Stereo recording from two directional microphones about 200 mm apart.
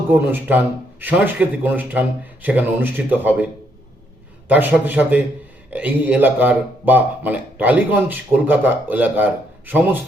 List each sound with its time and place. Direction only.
0.3 s a man's voice: 10° right (ahead or behind)